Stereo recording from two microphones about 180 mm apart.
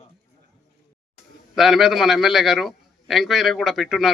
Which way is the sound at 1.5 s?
Centre (ahead or behind).